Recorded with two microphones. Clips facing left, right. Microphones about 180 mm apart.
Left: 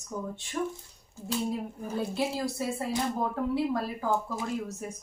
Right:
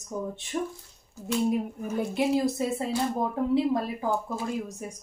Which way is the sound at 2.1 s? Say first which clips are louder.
Right 6 dB; 20° right (ahead or behind).